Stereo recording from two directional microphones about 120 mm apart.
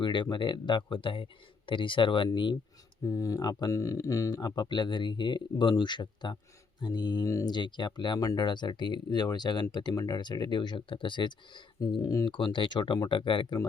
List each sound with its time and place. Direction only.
0.0 s speech: 40° left (ahead or behind)
3.0 s speech: 25° left (ahead or behind); by 13.6 s 45° left (ahead or behind)